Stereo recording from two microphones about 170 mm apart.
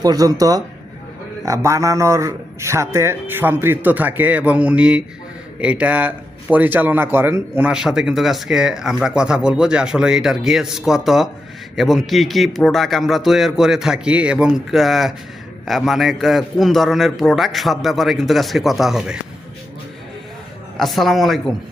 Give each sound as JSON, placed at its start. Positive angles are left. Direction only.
{"t": 0.0, "sound": "a man's voice", "side_deg": -20}
{"t": 20.7, "sound": "a man's voice", "side_deg": 0}